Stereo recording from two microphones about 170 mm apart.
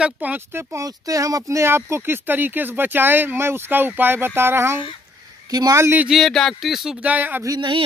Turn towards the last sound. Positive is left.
turn(degrees=-25)  # may be behind; listen again after turning